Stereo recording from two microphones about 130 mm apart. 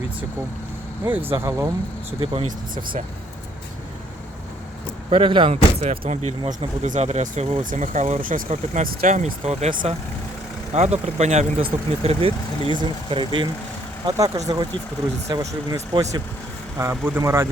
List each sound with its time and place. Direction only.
1.0 s speech: 15° right (ahead or behind)
2.2 s speech: 45° right (ahead or behind)
5.1 s speech: 45° right (ahead or behind)
5.8 s speech: 60° right (ahead or behind)
7.6 s speech: 80° right
8.7 s speech: 70° right (ahead or behind)
12.0 s speech: 45° right (ahead or behind)
14.0 s speech: 25° right (ahead or behind)